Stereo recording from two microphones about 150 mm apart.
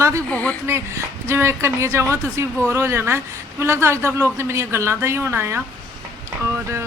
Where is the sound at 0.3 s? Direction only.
10° left (ahead or behind).